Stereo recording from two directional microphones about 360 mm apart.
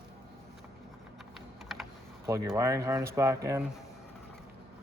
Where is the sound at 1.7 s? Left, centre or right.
Centre.